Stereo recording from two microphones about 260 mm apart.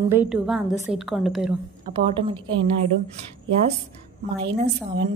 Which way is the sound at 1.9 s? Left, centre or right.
Centre.